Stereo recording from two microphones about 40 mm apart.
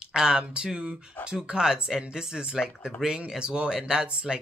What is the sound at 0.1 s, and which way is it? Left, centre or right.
Speech, centre.